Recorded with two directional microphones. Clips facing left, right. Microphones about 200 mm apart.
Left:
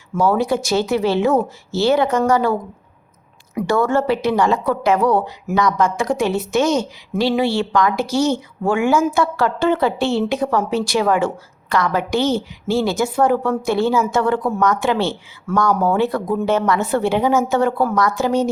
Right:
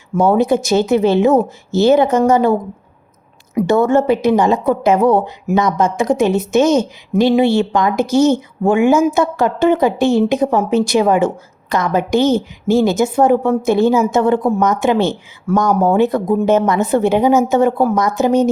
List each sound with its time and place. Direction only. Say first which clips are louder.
0.2 s a woman's voice: right 4 dB; 20° right (ahead or behind)